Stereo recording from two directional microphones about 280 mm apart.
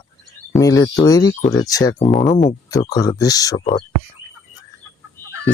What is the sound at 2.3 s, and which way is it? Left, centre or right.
Speech, centre.